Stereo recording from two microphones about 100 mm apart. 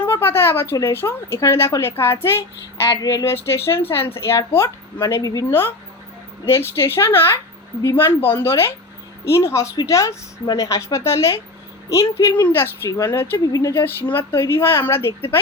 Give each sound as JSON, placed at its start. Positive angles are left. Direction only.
{"t": 0.0, "sound": "a woman's voice", "side_deg": 25}
{"t": 3.0, "sound": "a woman's voice", "side_deg": 40}
{"t": 3.4, "sound": "a woman's voice", "side_deg": 25}
{"t": 5.5, "sound": "a woman's voice", "side_deg": 25}
{"t": 10.4, "sound": "speech", "side_deg": 45}
{"t": 10.7, "sound": "a woman's voice", "side_deg": 30}